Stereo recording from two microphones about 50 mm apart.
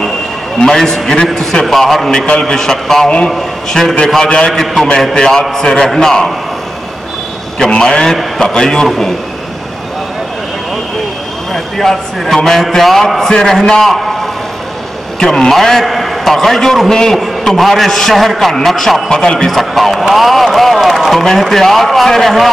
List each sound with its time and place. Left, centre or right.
0.6 s a man's voice: centre
4.2 s a man's voice: centre
7.5 s a man's voice: centre
11.5 s a man's voice: centre
15.1 s a man's voice: centre
17.2 s a man's voice: centre
19.5 s a man's voice: centre